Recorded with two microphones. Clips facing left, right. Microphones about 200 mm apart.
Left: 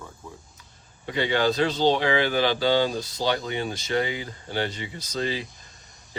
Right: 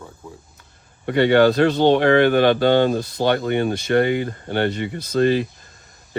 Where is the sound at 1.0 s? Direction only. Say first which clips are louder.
Right 9 dB; 60° right (ahead or behind).